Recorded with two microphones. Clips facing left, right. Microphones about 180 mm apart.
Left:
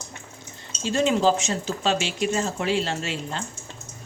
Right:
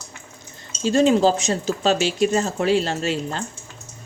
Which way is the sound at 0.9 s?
40° right (ahead or behind).